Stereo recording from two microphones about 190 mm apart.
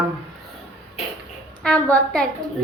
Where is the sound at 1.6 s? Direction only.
5° left (ahead or behind).